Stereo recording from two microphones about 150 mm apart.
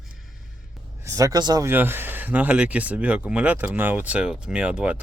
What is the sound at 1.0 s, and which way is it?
Speech, 20° right (ahead or behind).